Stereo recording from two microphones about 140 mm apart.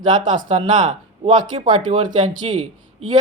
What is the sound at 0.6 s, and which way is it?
Speech, 60° right (ahead or behind).